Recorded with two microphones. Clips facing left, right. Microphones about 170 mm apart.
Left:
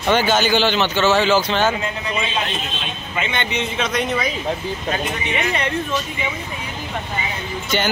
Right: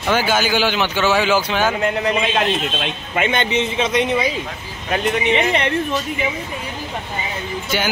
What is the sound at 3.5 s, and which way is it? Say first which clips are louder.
Speech: right 4 dB; 25° right (ahead or behind).